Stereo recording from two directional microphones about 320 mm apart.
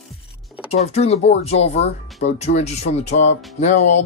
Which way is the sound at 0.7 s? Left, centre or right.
Centre.